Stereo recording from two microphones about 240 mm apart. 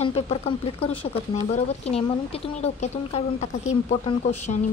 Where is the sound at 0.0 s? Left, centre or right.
Left.